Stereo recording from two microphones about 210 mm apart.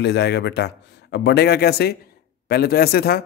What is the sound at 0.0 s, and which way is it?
A man's voice, 55° left (ahead or behind).